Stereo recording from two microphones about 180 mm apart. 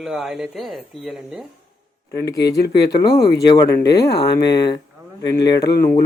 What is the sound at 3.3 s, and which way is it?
Speech, 20° left (ahead or behind).